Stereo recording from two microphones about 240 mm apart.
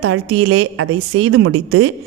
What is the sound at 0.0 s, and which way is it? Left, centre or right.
A woman's voice, right.